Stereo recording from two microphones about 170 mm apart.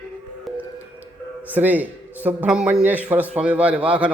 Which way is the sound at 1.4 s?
10° right (ahead or behind).